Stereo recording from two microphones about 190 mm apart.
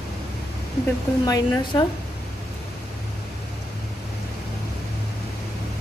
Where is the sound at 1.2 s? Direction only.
20° left (ahead or behind).